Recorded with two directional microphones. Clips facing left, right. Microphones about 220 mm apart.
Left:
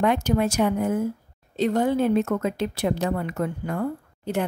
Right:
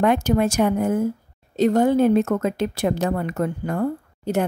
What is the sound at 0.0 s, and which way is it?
A woman's voice, 50° right (ahead or behind).